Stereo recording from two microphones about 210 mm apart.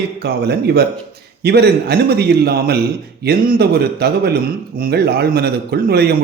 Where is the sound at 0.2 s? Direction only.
50° right (ahead or behind).